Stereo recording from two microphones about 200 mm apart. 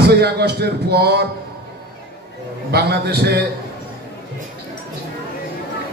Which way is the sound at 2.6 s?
55° right (ahead or behind).